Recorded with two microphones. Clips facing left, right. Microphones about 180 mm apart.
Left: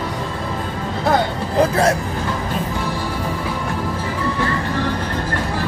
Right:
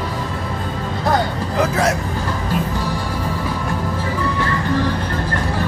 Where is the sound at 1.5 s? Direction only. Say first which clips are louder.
Left 3 dB; 30° left (ahead or behind).